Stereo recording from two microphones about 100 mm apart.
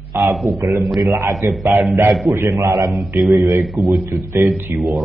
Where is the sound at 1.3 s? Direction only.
Centre (ahead or behind).